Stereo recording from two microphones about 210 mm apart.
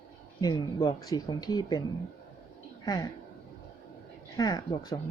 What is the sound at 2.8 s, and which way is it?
Speech, 20° left (ahead or behind).